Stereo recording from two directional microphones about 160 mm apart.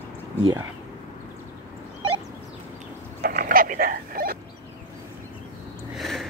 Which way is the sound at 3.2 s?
65° right (ahead or behind).